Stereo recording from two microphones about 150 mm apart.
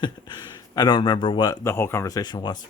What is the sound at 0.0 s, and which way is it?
Speech, 30° left (ahead or behind).